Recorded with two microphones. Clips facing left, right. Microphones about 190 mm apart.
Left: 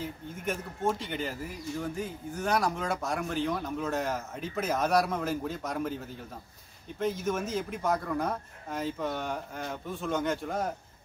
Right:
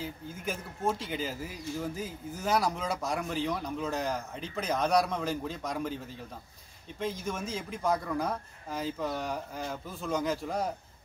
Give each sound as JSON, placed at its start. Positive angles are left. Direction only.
{"t": 0.0, "sound": "a man's voice", "side_deg": 0}